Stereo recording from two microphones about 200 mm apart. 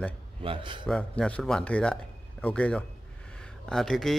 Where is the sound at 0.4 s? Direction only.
25° right (ahead or behind).